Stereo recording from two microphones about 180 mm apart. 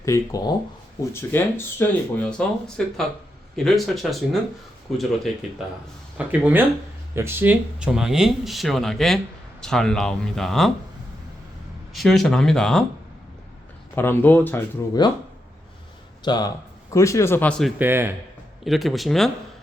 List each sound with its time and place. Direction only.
0.0 s speech: 15° left (ahead or behind); by 10.7 s centre (ahead or behind)
11.9 s speech: centre (ahead or behind)
13.9 s speech: 10° left (ahead or behind)
16.2 s speech: 25° left (ahead or behind); by 17.7 s 5° left (ahead or behind)
17.7 s speech: 10° right (ahead or behind)
18.6 s speech: centre (ahead or behind)